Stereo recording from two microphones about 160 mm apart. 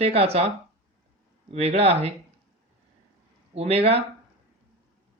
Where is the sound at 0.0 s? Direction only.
40° right (ahead or behind).